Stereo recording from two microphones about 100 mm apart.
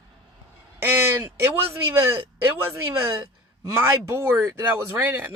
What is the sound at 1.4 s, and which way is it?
Speech, 25° right (ahead or behind).